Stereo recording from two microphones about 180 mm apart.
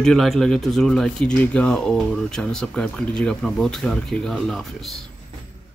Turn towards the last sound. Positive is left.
turn(degrees=0)  # may be behind; listen again after turning